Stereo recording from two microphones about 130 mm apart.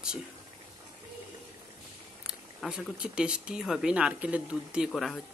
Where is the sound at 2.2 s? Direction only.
Centre (ahead or behind).